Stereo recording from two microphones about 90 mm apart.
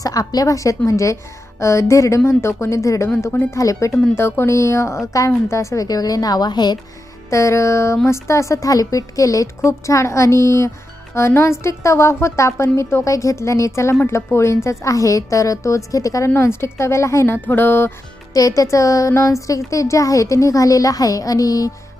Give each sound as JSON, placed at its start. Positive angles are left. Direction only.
{"t": 0.0, "sound": "a woman's voice", "side_deg": 40}
{"t": 7.3, "sound": "a woman's voice", "side_deg": 35}
{"t": 18.3, "sound": "speech", "side_deg": 40}